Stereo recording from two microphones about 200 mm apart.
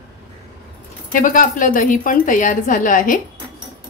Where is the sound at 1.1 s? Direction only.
40° left (ahead or behind).